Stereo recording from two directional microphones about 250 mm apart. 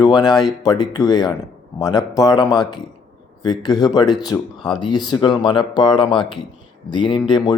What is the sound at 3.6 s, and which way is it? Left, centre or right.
Speech, centre.